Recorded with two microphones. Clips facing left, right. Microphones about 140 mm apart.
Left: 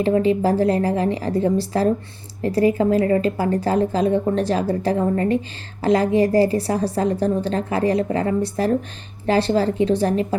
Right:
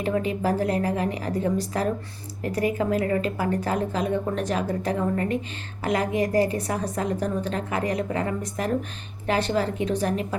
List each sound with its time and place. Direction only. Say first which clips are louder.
0.0 s a woman's voice: left 7 dB; 30° left (ahead or behind)